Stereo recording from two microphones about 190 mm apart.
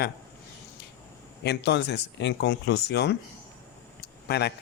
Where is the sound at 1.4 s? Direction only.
60° left (ahead or behind).